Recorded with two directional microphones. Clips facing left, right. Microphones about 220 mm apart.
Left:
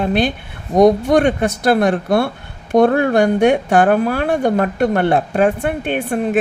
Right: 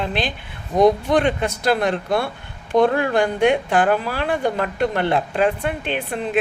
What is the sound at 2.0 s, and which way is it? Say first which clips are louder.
Speech: left 6 dB; 65° left (ahead or behind).